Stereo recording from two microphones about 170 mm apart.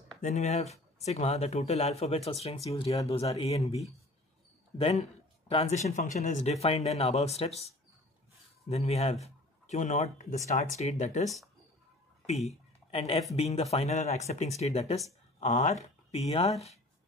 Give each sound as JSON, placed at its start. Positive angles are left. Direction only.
{"t": 0.2, "sound": "speech", "side_deg": 40}
{"t": 12.3, "sound": "speech", "side_deg": 40}